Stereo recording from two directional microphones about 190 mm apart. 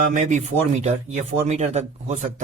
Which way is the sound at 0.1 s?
40° right (ahead or behind).